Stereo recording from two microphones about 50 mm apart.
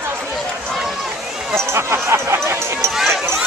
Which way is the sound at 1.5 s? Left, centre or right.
Right.